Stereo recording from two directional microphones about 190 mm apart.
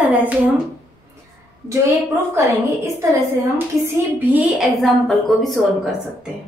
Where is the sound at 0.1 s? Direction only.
10° right (ahead or behind).